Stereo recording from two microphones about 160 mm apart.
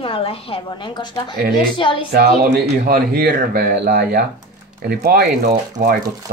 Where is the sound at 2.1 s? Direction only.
65° right (ahead or behind).